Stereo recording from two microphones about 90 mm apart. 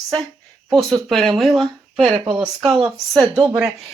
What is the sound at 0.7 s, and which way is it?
Speech, centre (ahead or behind).